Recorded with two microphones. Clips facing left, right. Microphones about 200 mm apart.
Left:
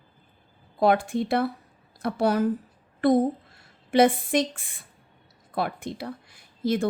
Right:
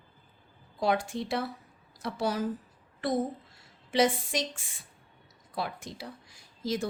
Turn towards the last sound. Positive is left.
turn(degrees=60)  # may be behind; listen again after turning